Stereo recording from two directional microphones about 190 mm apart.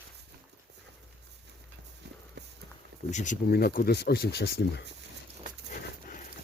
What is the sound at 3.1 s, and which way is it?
Speech, 40° left (ahead or behind).